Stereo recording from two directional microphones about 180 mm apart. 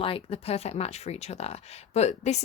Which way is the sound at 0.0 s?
30° left (ahead or behind).